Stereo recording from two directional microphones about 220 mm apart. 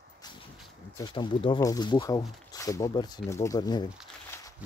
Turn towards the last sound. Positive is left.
turn(degrees=20)  # may be behind; listen again after turning